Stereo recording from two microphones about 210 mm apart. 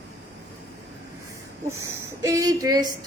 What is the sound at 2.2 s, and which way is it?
Speech, 15° right (ahead or behind).